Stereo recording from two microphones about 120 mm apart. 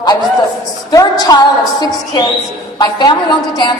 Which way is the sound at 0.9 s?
30° left (ahead or behind).